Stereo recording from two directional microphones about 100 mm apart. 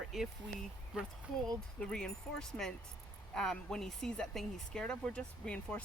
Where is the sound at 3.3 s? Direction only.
5° left (ahead or behind).